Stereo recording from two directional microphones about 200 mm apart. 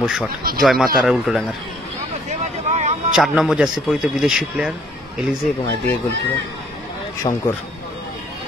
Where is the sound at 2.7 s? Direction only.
35° right (ahead or behind).